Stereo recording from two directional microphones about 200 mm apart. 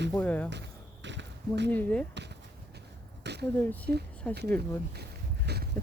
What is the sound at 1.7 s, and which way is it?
Speech, 5° left (ahead or behind).